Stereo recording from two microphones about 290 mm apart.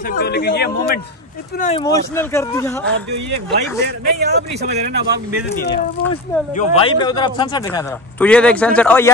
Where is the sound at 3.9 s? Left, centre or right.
Right.